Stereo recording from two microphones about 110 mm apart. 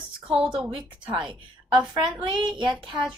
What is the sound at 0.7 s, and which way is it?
Speech, 50° right (ahead or behind).